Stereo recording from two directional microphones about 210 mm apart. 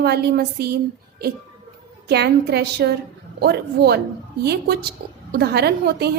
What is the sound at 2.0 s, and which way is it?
A woman's voice, 50° right (ahead or behind).